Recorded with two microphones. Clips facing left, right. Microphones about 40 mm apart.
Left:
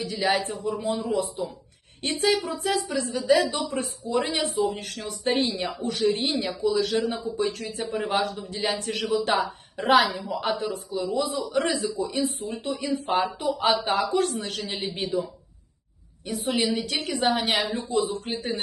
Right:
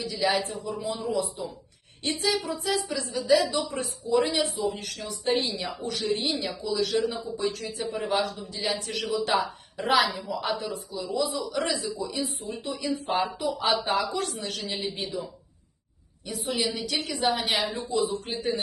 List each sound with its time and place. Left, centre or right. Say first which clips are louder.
0.3 s speech: left 2 dB; left
2.0 s speech: left 3 dB; left
3.8 s a man's voice: right 3 dB; left
16.3 s speech: left 4 dB; left
17.6 s speech: left 2 dB; centre
17.8 s speech: left 1 dB; left